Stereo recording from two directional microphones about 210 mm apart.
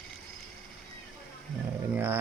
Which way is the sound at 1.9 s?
10° right (ahead or behind).